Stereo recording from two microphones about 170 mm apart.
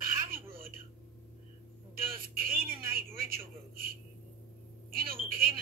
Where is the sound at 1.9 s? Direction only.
60° right (ahead or behind).